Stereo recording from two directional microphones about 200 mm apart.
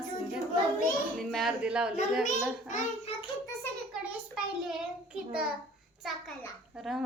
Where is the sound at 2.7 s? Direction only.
40° left (ahead or behind).